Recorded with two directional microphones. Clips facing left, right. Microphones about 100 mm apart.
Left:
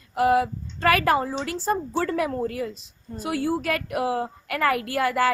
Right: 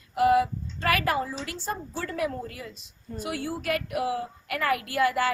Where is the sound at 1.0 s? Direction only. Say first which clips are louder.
Left 5 dB; 45° left (ahead or behind).